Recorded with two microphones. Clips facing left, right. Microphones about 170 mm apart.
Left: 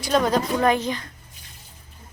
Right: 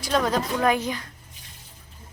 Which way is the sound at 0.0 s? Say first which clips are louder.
Left 3 dB; centre (ahead or behind).